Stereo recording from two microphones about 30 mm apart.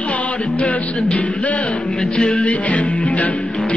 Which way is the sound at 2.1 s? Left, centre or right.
Left.